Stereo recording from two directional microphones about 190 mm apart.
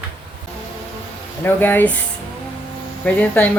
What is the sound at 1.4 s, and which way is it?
Speech, 10° left (ahead or behind).